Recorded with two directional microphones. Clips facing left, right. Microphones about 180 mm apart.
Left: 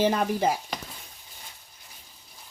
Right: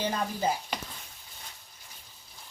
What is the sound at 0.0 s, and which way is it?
Stir, 75° left (ahead or behind).